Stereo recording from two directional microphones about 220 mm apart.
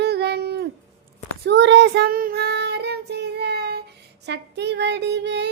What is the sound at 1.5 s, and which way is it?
Child singing, 55° right (ahead or behind).